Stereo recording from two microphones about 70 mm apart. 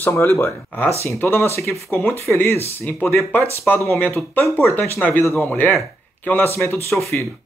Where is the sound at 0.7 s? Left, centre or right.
Left.